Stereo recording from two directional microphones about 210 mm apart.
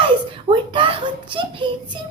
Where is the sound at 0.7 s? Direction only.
25° right (ahead or behind).